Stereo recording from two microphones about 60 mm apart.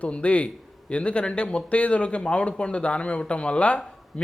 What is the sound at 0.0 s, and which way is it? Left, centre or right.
Speech, left.